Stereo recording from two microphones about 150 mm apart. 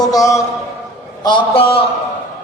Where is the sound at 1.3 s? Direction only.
35° left (ahead or behind).